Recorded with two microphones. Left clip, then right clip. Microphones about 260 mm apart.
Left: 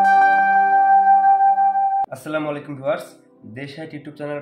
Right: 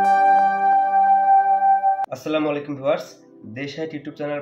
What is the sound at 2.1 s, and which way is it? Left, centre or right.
Speech, centre.